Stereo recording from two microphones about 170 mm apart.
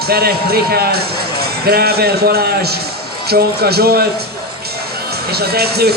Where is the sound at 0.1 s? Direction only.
65° right (ahead or behind).